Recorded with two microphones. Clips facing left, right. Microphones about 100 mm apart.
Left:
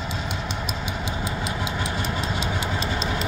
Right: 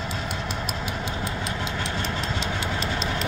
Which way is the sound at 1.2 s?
5° left (ahead or behind).